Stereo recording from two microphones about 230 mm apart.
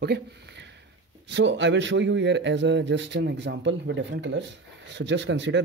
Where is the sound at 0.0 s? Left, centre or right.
Right.